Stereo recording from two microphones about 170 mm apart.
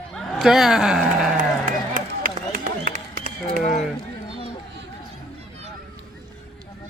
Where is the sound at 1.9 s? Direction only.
55° right (ahead or behind).